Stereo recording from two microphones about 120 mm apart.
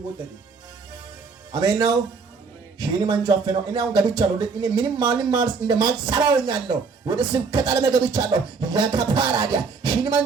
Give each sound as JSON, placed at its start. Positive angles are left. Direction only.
{"t": 1.5, "sound": "speech", "side_deg": -35}